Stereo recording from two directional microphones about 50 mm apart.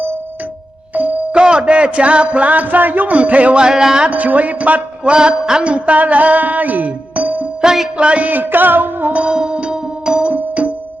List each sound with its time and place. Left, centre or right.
0.9 s music: right
3.7 s music: centre
4.1 s speech: right
5.1 s a sound: centre
7.6 s music: centre
7.9 s music: right
9.2 s music: centre
10.3 s music: right